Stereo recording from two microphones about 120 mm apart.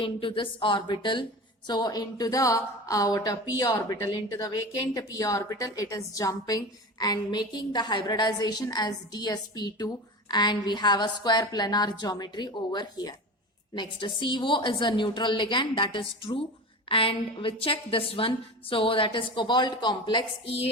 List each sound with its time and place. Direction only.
0.0 s a woman's voice: 45° left (ahead or behind)